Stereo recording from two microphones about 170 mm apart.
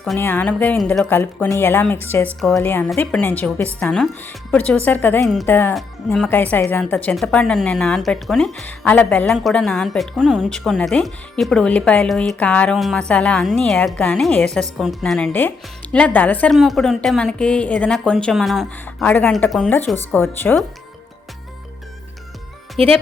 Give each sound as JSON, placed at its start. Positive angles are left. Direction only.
{"t": 0.2, "sound": "speech", "side_deg": 10}
{"t": 5.2, "sound": "a woman's voice", "side_deg": 0}
{"t": 5.5, "sound": "a woman's voice", "side_deg": 10}
{"t": 22.8, "sound": "speech", "side_deg": -35}